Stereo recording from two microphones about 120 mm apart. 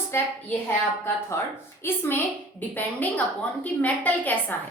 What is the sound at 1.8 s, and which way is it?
Speech, 20° left (ahead or behind).